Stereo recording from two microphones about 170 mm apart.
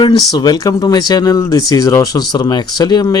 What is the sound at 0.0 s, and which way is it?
Speech, 25° left (ahead or behind).